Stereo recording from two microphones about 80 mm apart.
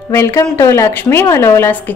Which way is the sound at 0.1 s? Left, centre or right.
Left.